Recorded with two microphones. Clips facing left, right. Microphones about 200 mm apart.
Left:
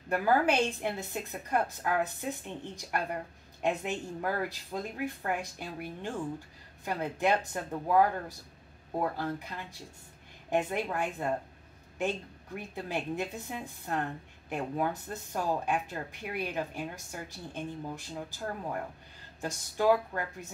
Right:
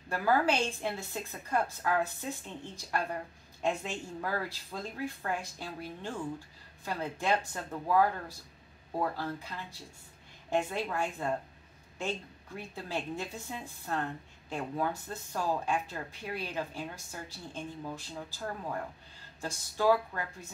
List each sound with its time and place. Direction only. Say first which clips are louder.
0.1 s speech: left 2 dB; 20° left (ahead or behind)
10.5 s speech: left 1 dB; 20° left (ahead or behind)
12.7 s speech: left 3 dB; 20° left (ahead or behind)